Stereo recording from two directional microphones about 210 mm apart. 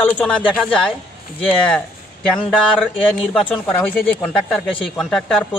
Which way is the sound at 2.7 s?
5° left (ahead or behind).